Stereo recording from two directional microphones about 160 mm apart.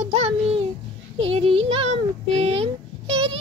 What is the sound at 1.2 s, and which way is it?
Speech, 35° right (ahead or behind).